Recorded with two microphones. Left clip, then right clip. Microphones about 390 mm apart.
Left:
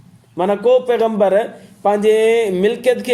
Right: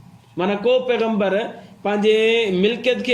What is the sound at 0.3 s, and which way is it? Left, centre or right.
A man's voice, centre.